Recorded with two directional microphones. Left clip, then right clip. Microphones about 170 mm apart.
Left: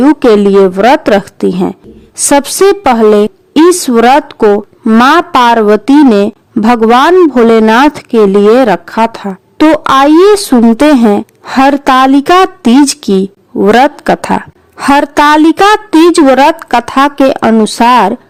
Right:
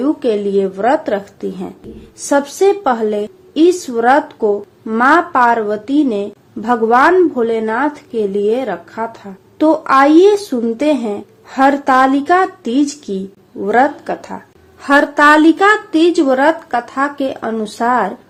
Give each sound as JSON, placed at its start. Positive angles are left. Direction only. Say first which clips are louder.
{"t": 0.0, "sound": "a woman's voice", "louder": "left 10 dB", "side_deg": 75}
{"t": 16.1, "sound": "a woman's voice", "louder": "left 7 dB", "side_deg": 80}